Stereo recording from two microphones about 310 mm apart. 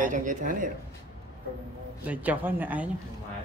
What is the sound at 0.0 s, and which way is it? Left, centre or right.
Speech, right.